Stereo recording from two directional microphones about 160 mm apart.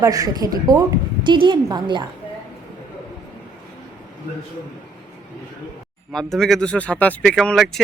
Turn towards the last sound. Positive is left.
turn(degrees=0)  # may be behind; listen again after turning